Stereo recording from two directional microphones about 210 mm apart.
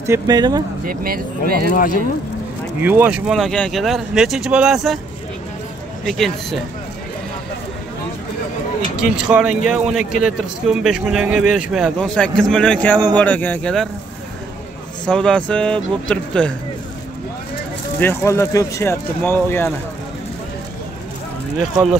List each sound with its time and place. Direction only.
0.0 s speech: 15° right (ahead or behind)
0.8 s speech: 45° right (ahead or behind)
1.7 s speech: 40° left (ahead or behind)
2.8 s speech: 10° right (ahead or behind)
6.0 s speech: centre (ahead or behind)
9.1 s speech: 5° right (ahead or behind)
15.0 s speech: 5° left (ahead or behind)
18.0 s speech: 10° left (ahead or behind)